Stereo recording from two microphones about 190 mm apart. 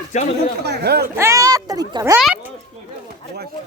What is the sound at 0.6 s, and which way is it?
Speech, 60° right (ahead or behind).